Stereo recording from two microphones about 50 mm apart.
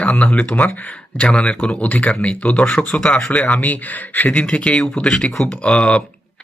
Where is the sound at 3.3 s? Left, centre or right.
Left.